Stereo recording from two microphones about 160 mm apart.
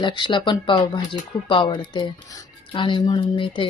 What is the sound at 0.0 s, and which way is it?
Speech, 30° left (ahead or behind).